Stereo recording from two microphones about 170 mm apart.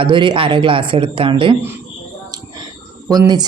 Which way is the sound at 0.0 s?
30° right (ahead or behind).